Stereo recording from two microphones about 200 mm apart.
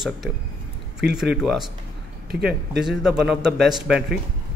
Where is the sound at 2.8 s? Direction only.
Centre (ahead or behind).